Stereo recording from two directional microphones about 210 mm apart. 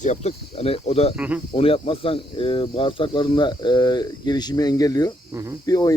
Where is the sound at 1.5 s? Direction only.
25° left (ahead or behind).